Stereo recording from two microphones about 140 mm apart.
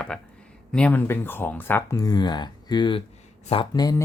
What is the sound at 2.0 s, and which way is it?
Speech, 30° left (ahead or behind).